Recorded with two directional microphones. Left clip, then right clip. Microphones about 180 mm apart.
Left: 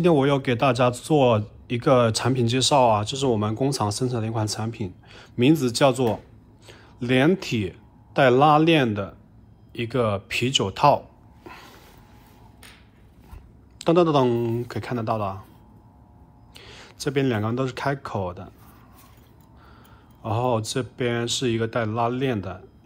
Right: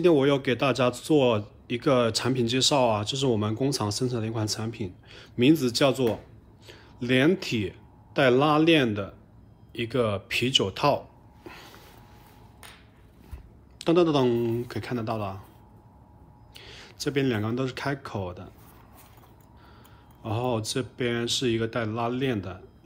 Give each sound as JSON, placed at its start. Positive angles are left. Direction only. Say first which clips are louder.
{"t": 0.0, "sound": "a man's voice", "louder": "left 1 dB", "side_deg": -10}
{"t": 13.7, "sound": "a man's voice", "louder": "left 3 dB", "side_deg": -10}
{"t": 16.5, "sound": "speech", "louder": "left 1 dB", "side_deg": -10}
{"t": 20.2, "sound": "a man's voice", "louder": "left 5 dB", "side_deg": -10}